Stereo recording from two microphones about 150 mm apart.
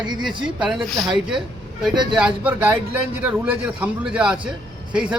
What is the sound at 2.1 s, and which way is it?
A man's voice, 10° right (ahead or behind).